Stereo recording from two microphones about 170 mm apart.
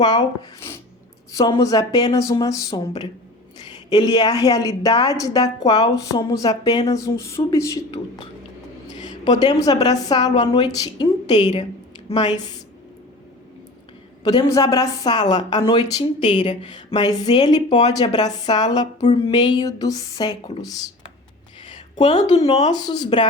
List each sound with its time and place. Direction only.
0.0 s a woman's voice: 25° left (ahead or behind)
14.3 s a woman's voice: 20° left (ahead or behind)
16.0 s speech: 45° left (ahead or behind)
16.6 s a woman's voice: 25° left (ahead or behind)
17.7 s speech: 40° left (ahead or behind)
17.9 s a woman's voice: 25° left (ahead or behind)
22.0 s speech: 30° left (ahead or behind)
22.7 s a woman's voice: 25° left (ahead or behind)